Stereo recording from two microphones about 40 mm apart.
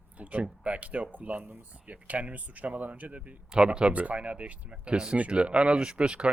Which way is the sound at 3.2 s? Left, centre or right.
Right.